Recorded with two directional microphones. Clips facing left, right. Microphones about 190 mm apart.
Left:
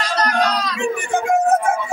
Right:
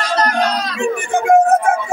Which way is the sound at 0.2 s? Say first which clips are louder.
Right 1 dB; 55° right (ahead or behind).